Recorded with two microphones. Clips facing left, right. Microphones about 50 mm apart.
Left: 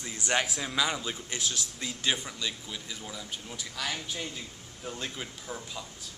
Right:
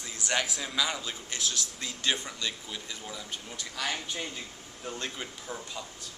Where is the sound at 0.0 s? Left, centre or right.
Centre.